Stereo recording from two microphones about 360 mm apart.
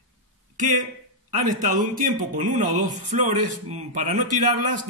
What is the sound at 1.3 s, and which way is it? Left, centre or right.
Speech, right.